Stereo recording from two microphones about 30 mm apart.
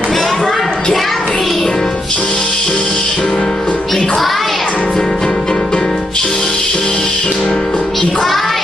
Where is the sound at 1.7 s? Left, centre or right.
Left.